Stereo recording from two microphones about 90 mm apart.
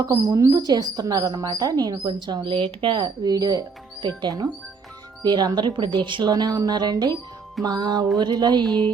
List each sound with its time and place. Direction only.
0.0 s speech: 40° right (ahead or behind)
0.5 s speech: 50° right (ahead or behind)
6.3 s speech: 45° right (ahead or behind)